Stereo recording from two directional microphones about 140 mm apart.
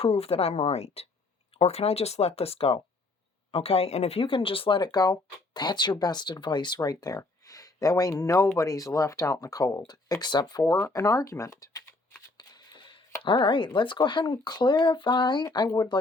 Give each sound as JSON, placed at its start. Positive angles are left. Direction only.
{"t": 0.0, "sound": "speech", "side_deg": 45}
{"t": 12.4, "sound": "camera", "side_deg": 30}
{"t": 13.2, "sound": "speech", "side_deg": 35}